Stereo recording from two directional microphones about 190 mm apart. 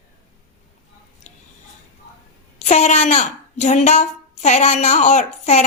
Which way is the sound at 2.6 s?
35° left (ahead or behind).